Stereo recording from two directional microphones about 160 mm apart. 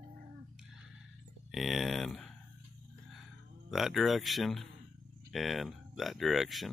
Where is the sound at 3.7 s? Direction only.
Centre (ahead or behind).